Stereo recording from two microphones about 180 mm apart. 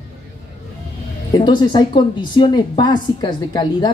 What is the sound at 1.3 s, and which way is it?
A woman's voice, 25° left (ahead or behind).